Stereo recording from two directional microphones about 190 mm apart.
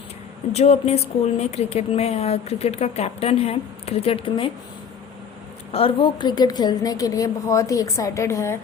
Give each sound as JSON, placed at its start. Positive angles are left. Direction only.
{"t": 0.5, "sound": "a woman's voice", "side_deg": 35}
{"t": 5.7, "sound": "a woman's voice", "side_deg": 25}